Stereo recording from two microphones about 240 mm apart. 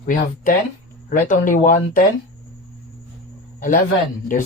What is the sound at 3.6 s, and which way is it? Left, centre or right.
Speech, left.